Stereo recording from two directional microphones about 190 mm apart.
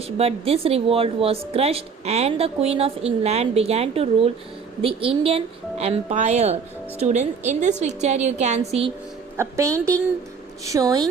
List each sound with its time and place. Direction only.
0.0 s speech: 30° right (ahead or behind)
9.4 s a woman's voice: 15° right (ahead or behind)